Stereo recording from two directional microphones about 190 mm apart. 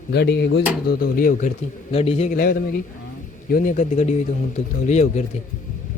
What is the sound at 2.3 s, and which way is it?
Speech, 50° left (ahead or behind).